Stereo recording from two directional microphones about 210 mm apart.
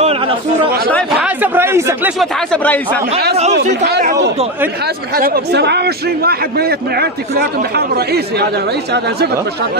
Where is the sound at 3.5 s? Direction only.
55° right (ahead or behind).